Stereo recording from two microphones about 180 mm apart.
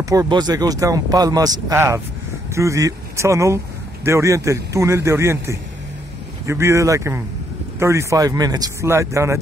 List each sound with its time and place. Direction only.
0.0 s speech: 20° right (ahead or behind)